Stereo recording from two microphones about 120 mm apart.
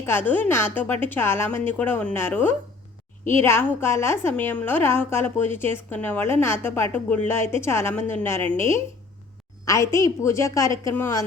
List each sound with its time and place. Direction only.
0.0 s a woman's voice: 20° left (ahead or behind)
9.9 s a woman's voice: 25° left (ahead or behind)